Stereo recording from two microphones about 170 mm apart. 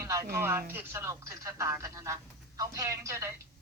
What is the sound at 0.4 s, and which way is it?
Speech, 15° right (ahead or behind).